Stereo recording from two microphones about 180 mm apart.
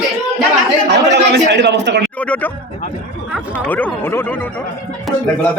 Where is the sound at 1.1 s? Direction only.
75° right (ahead or behind).